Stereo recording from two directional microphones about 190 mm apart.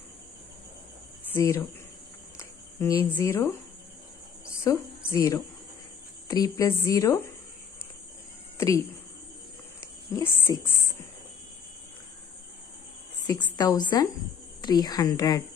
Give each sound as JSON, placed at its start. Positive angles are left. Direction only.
{"t": 1.3, "sound": "a woman's voice", "side_deg": 15}
{"t": 3.0, "sound": "a woman's voice", "side_deg": 15}
{"t": 4.5, "sound": "a woman's voice", "side_deg": 15}
{"t": 8.5, "sound": "speech", "side_deg": 15}
{"t": 10.1, "sound": "a woman's voice", "side_deg": 10}
{"t": 13.6, "sound": "a woman's voice", "side_deg": 20}